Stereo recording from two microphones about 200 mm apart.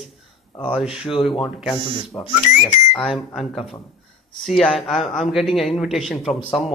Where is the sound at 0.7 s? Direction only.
Centre (ahead or behind).